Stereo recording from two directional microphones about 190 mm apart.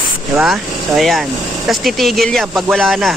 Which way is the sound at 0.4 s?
Centre (ahead or behind).